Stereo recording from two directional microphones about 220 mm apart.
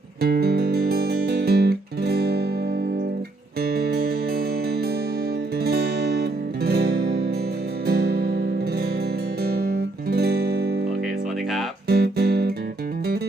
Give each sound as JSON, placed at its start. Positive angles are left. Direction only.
{"t": 0.2, "sound": "music", "side_deg": -45}
{"t": 3.6, "sound": "music", "side_deg": -45}
{"t": 5.6, "sound": "music", "side_deg": -45}
{"t": 11.9, "sound": "music", "side_deg": -45}